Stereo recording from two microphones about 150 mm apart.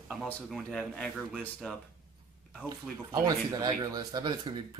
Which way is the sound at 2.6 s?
20° right (ahead or behind).